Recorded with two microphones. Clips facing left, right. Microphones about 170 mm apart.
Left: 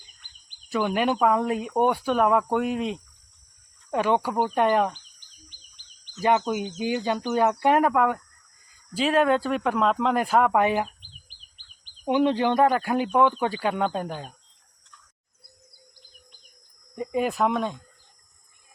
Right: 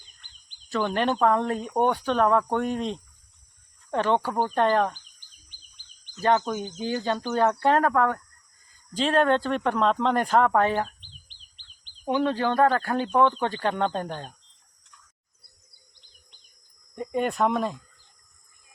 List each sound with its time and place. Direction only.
0.4 s speech: 10° left (ahead or behind)
5.5 s bird vocalization: 15° left (ahead or behind)
6.7 s speech: 15° left (ahead or behind)
12.0 s speech: 15° left (ahead or behind)
17.0 s speech: 5° left (ahead or behind)